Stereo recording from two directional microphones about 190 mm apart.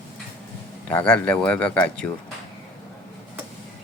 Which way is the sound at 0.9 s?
5° left (ahead or behind).